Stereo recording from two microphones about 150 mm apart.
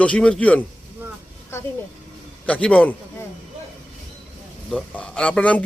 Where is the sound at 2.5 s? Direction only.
10° left (ahead or behind).